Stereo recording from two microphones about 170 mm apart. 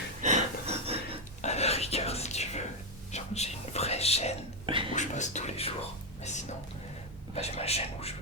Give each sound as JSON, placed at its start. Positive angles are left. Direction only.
{"t": 0.2, "sound": "a sound", "side_deg": -45}
{"t": 1.4, "sound": "whispering", "side_deg": 40}
{"t": 4.6, "sound": "whispering", "side_deg": -30}
{"t": 4.9, "sound": "speech", "side_deg": 45}
{"t": 7.3, "sound": "speech", "side_deg": 35}